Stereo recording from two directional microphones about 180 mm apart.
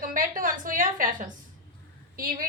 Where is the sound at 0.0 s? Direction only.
50° right (ahead or behind).